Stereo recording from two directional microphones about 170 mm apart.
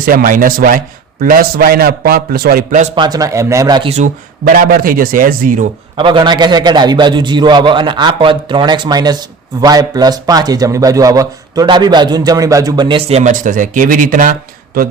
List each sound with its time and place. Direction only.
0.0 s a man's voice: 60° right (ahead or behind)
2.9 s a man's voice: 25° right (ahead or behind)
3.8 s speech: 45° right (ahead or behind)
6.0 s a man's voice: 30° right (ahead or behind); by 14.3 s 55° right (ahead or behind)